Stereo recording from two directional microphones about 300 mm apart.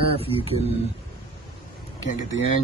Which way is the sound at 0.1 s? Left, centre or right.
Centre.